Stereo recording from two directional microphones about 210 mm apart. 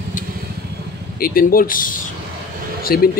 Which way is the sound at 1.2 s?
45° left (ahead or behind).